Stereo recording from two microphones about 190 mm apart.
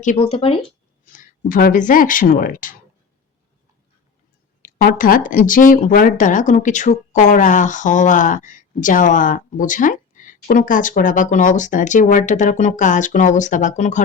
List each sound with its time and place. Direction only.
0.0 s speech: 35° left (ahead or behind)
1.1 s speech: 45° left (ahead or behind)
4.6 s speech: 50° left (ahead or behind)